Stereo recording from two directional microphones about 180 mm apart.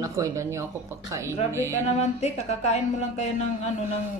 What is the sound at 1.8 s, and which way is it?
Speech, 40° left (ahead or behind).